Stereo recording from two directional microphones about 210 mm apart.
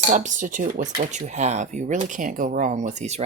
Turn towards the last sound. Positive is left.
turn(degrees=-30)  # may be behind; listen again after turning